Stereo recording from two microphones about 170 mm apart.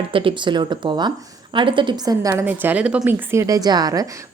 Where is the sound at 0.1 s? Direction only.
30° right (ahead or behind).